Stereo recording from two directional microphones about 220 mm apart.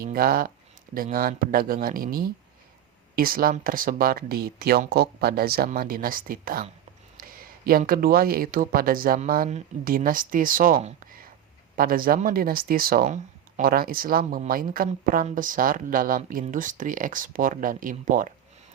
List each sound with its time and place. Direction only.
0.0 s speech: 40° right (ahead or behind)
11.0 s a sound: 40° right (ahead or behind)
11.8 s speech: 40° right (ahead or behind)